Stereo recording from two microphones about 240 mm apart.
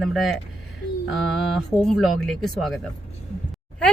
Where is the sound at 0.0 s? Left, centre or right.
Centre.